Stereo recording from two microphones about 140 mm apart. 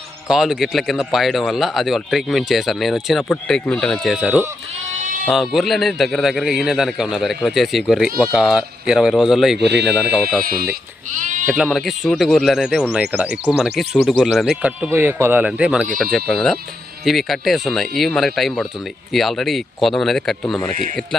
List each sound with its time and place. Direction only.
0.3 s speech: 5° right (ahead or behind)
10.4 s speech: 90° right; by 11.4 s 65° right (ahead or behind)
11.4 s speech: 5° right (ahead or behind)